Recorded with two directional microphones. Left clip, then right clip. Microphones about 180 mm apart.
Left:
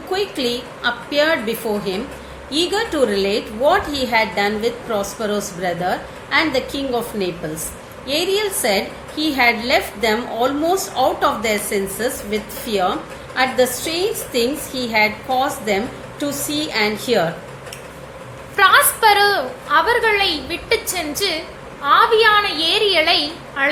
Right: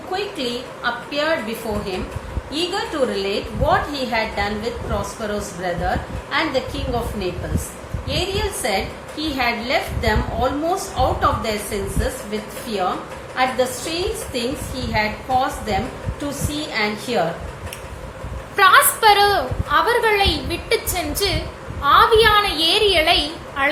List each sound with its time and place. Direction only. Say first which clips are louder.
0.1 s a woman's voice: left 4 dB; 60° left (ahead or behind)
18.5 s a woman's voice: even; centre (ahead or behind)